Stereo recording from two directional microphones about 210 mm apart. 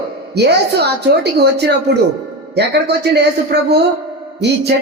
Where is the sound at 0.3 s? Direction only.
50° right (ahead or behind).